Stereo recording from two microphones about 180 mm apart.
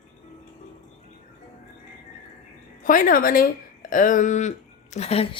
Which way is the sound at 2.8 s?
45° left (ahead or behind).